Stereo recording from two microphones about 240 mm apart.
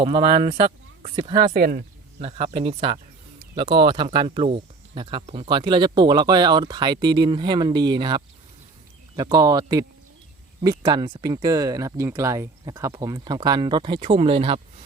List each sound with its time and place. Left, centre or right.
0.0 s speech: centre
1.5 s speech: right
2.1 s speech: right